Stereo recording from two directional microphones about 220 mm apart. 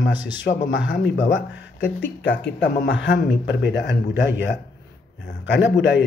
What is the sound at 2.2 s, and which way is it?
A man's voice, 55° left (ahead or behind).